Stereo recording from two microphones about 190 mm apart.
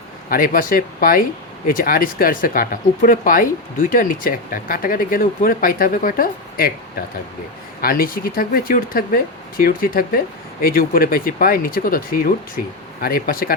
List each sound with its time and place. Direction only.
0.3 s speech: 45° left (ahead or behind)
7.8 s speech: 50° left (ahead or behind)